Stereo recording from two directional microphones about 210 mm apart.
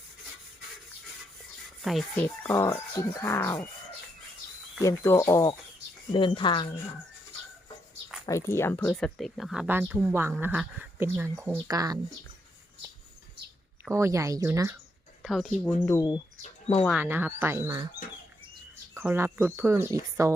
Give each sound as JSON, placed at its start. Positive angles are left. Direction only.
{"t": 1.8, "sound": "speech", "side_deg": 0}
{"t": 2.2, "sound": "speech", "side_deg": 10}
{"t": 4.8, "sound": "speech", "side_deg": 15}
{"t": 8.3, "sound": "speech", "side_deg": 15}
{"t": 13.9, "sound": "speech", "side_deg": -15}
{"t": 15.2, "sound": "speech", "side_deg": 0}
{"t": 15.9, "sound": "speech", "side_deg": 20}
{"t": 16.4, "sound": "speech", "side_deg": 30}
{"t": 16.9, "sound": "speech", "side_deg": -10}
{"t": 18.9, "sound": "speech", "side_deg": -10}